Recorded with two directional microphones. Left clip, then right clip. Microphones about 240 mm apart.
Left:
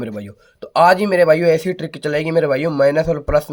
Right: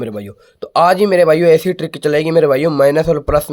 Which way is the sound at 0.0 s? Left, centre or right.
Centre.